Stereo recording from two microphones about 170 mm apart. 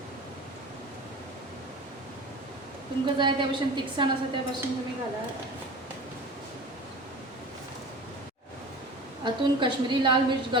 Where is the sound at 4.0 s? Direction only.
30° right (ahead or behind).